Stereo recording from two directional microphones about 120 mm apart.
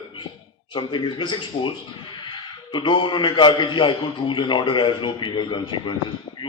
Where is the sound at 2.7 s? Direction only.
40° left (ahead or behind).